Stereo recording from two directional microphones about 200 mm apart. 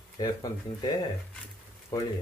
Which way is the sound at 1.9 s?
15° left (ahead or behind).